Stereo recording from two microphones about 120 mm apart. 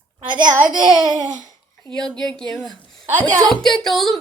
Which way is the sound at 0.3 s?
40° right (ahead or behind).